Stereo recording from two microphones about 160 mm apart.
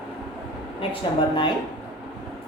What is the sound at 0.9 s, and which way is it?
Speech, 30° left (ahead or behind).